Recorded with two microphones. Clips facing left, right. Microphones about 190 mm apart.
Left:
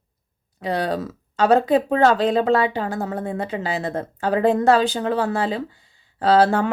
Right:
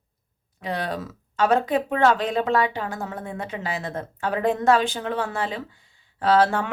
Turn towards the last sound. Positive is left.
turn(degrees=30)  # may be behind; listen again after turning